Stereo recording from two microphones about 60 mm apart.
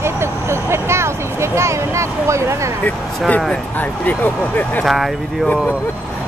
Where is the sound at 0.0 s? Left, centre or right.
Right.